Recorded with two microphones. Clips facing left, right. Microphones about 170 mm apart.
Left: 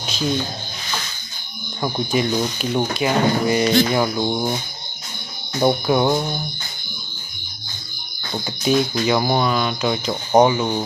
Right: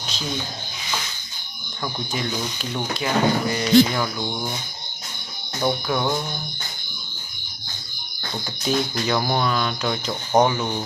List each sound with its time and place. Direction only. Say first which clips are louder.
1.8 s speech: left 7 dB; 20° left (ahead or behind)
5.6 s speech: left 6 dB; 25° left (ahead or behind)
8.6 s speech: left 5 dB; 10° left (ahead or behind)